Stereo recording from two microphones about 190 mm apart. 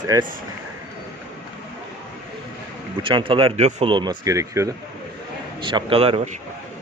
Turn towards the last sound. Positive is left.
turn(degrees=-30)  # may be behind; listen again after turning